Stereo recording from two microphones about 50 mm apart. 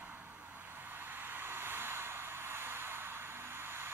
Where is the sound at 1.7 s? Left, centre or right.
Right.